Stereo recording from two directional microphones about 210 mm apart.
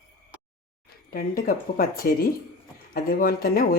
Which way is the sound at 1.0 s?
45° left (ahead or behind).